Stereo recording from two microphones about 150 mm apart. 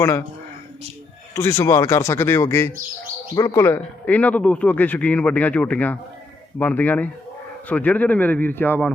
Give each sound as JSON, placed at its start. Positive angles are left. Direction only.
{"t": 1.4, "sound": "a man's voice", "side_deg": 15}